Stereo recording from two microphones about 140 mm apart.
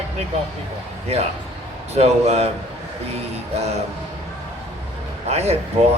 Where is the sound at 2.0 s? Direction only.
50° right (ahead or behind).